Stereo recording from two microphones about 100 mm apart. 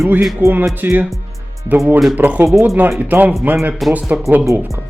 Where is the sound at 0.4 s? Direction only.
30° right (ahead or behind).